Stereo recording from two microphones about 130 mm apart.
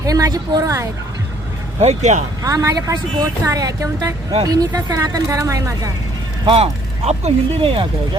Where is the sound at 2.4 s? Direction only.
25° right (ahead or behind).